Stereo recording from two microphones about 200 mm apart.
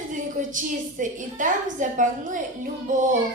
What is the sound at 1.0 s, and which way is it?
A child's voice, 40° right (ahead or behind).